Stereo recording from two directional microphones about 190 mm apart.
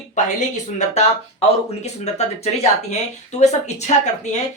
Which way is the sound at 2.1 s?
35° left (ahead or behind).